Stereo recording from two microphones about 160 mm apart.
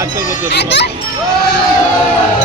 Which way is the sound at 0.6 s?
90° left.